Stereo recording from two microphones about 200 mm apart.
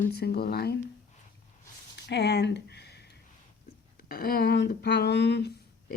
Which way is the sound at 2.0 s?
55° left (ahead or behind).